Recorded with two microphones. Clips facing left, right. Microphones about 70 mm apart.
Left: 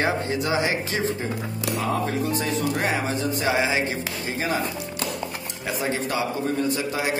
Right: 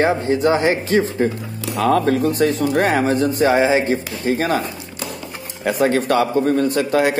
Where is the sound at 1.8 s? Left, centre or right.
Right.